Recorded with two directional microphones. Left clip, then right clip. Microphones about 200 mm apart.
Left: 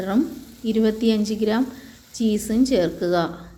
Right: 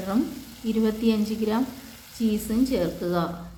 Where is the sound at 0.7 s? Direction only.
15° left (ahead or behind).